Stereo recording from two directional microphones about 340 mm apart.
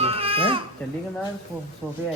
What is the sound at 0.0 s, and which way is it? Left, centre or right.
Baby cry, centre.